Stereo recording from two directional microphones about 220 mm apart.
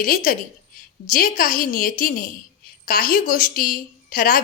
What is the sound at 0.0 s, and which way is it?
A woman's voice, 40° left (ahead or behind).